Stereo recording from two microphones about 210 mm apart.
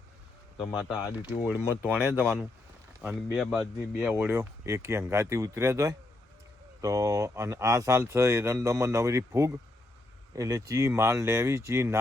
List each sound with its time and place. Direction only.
1.2 s speech: 10° right (ahead or behind)